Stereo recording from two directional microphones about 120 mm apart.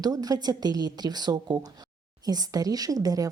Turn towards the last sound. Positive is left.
turn(degrees=-30)  # may be behind; listen again after turning